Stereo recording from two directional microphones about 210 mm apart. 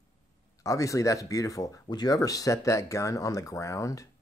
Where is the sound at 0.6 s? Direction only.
15° left (ahead or behind).